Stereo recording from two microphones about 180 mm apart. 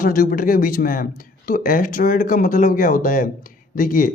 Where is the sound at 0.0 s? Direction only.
50° left (ahead or behind).